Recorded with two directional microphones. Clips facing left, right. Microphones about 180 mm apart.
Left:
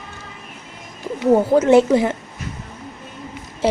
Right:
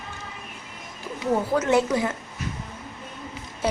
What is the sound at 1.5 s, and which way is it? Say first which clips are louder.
Speech: left 8 dB; 25° left (ahead or behind).